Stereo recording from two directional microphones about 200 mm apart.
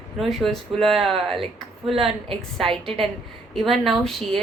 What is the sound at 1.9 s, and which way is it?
Speech, 30° right (ahead or behind).